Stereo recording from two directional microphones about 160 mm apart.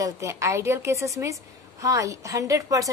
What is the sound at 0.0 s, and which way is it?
A woman's voice, 20° right (ahead or behind).